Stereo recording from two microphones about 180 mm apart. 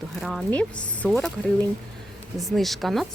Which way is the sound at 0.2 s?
Centre (ahead or behind).